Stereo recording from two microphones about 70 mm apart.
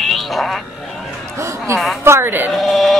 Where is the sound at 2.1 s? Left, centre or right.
Right.